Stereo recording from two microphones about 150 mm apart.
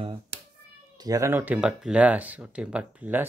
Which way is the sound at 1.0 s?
20° right (ahead or behind).